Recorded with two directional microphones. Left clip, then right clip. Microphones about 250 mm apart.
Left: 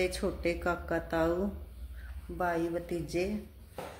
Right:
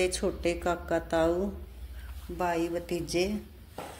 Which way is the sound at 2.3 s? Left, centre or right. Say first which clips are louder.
Right 2 dB; centre.